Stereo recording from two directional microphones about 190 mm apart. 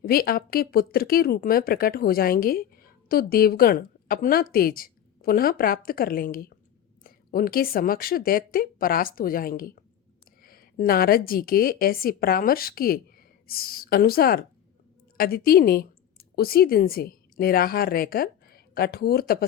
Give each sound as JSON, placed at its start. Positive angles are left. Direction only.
{"t": 0.0, "sound": "a woman's voice", "side_deg": 50}